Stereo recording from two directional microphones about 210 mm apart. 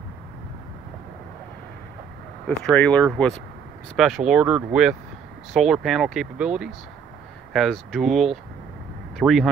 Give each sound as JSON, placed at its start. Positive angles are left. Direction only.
{"t": 2.4, "sound": "speech", "side_deg": 5}